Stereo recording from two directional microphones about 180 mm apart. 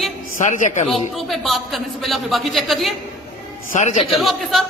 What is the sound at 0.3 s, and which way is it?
Speech, 45° left (ahead or behind).